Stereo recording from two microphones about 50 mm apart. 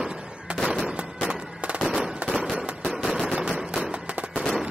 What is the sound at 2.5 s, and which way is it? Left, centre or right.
Firecracker, right.